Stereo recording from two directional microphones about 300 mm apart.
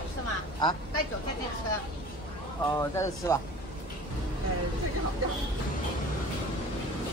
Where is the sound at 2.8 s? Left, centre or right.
Centre.